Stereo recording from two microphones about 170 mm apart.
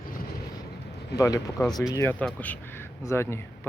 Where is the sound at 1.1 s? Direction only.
20° left (ahead or behind).